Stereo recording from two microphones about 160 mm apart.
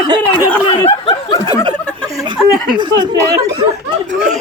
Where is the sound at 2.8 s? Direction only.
25° right (ahead or behind).